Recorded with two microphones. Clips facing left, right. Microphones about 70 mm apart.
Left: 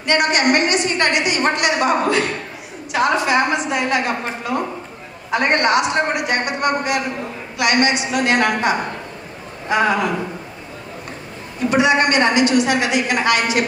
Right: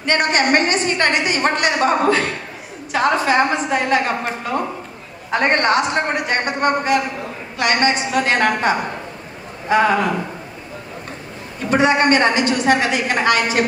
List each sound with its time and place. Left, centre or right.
0.0 s a woman's voice: right
5.3 s a woman's voice: right
11.7 s a woman's voice: right